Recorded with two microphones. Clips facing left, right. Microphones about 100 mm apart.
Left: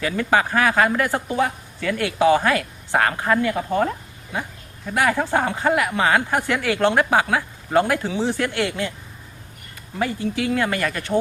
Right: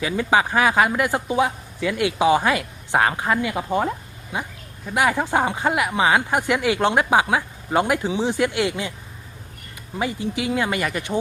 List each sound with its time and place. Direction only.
0.0 s speech: 15° right (ahead or behind)
10.0 s speech: 15° right (ahead or behind)